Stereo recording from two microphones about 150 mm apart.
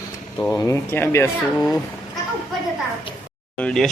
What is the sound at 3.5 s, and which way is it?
Speech, 5° left (ahead or behind).